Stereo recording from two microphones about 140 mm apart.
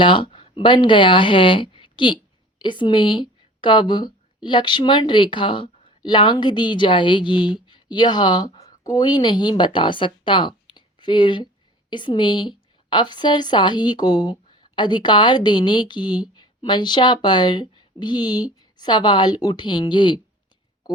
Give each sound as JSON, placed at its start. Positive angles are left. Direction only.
{"t": 0.0, "sound": "a woman's voice", "side_deg": 35}